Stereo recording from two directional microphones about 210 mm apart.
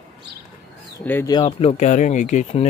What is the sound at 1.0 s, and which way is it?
Speech, 15° left (ahead or behind).